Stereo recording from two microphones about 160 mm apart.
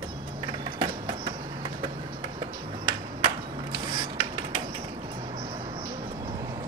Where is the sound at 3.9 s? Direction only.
30° right (ahead or behind).